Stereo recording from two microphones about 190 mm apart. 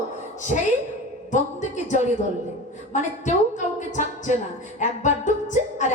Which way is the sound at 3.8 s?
40° left (ahead or behind).